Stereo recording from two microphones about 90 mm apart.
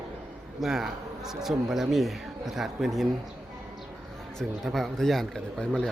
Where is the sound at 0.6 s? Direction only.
5° right (ahead or behind).